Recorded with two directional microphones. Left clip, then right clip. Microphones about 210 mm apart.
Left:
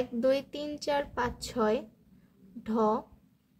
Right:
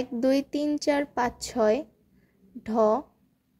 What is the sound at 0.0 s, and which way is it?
A woman's voice, 25° right (ahead or behind).